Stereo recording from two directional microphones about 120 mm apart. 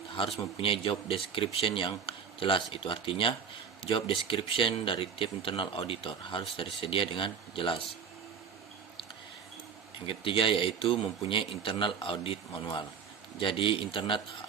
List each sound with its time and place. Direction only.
0.6 s a man's voice: 50° left (ahead or behind)
10.1 s a man's voice: 50° left (ahead or behind)